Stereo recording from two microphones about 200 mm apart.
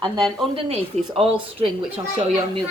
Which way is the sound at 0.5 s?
30° right (ahead or behind).